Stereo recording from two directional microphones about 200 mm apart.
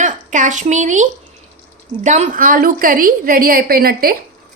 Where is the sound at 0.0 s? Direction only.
40° right (ahead or behind).